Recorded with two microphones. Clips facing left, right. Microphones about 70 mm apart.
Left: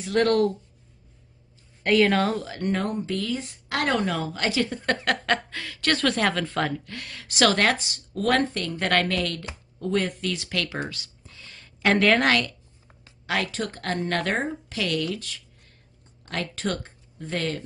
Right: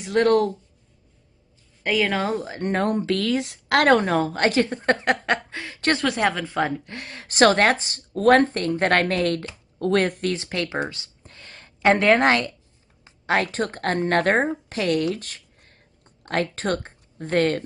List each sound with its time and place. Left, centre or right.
0.0 s speech: right
1.8 s a woman's voice: centre
2.2 s speech: right
3.0 s speech: right
4.0 s a woman's voice: right
5.9 s speech: centre
6.9 s a woman's voice: right
9.8 s speech: right
10.2 s speech: right
11.2 s a sound: right
11.8 s a woman's voice: right